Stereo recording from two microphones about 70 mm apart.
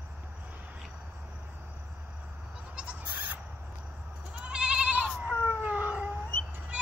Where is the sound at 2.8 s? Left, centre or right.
Centre.